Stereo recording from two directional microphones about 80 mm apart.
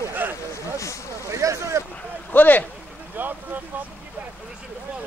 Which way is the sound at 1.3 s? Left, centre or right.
Right.